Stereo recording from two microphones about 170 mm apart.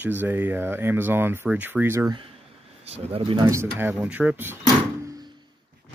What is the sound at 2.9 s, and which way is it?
Speech, 35° right (ahead or behind).